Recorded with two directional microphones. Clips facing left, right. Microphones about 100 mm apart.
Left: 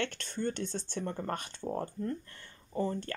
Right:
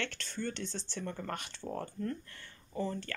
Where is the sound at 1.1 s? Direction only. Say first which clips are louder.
Left 3 dB; 30° left (ahead or behind).